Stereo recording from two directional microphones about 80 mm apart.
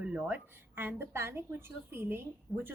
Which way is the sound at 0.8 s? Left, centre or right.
Right.